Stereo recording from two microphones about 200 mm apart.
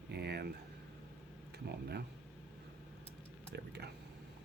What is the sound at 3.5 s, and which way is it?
Speech, 55° right (ahead or behind).